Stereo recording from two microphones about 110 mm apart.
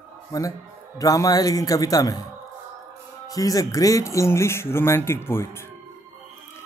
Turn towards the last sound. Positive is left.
turn(degrees=25)  # may be behind; listen again after turning